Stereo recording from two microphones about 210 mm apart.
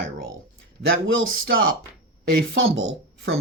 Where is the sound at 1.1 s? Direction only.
70° right (ahead or behind).